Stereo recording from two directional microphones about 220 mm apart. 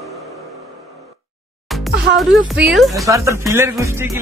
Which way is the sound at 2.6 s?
Centre (ahead or behind).